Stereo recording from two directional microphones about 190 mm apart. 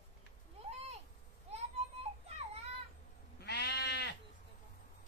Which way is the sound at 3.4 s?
60° left (ahead or behind).